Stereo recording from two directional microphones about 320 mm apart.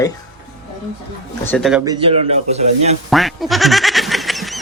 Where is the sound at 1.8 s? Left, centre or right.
Centre.